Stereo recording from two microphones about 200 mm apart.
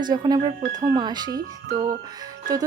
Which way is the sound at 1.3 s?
45° right (ahead or behind).